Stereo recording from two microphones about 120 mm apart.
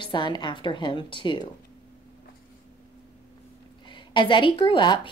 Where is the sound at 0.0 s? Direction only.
40° left (ahead or behind).